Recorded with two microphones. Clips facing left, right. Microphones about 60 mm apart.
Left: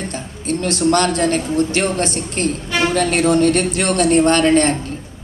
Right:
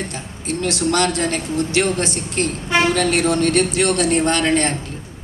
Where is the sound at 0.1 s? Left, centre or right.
Left.